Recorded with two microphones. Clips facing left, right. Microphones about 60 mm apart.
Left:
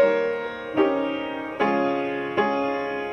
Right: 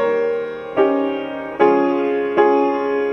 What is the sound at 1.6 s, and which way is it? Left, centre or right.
Music, centre.